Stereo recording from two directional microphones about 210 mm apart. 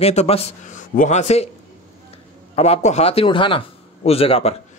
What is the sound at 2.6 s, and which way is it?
Speech, 30° left (ahead or behind).